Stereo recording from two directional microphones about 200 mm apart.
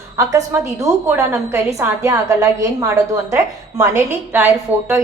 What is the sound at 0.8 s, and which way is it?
A woman's voice, 15° right (ahead or behind).